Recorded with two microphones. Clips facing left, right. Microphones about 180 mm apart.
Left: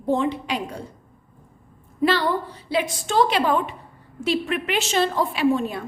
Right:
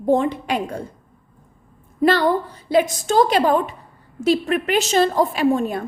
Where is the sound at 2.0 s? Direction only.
45° right (ahead or behind).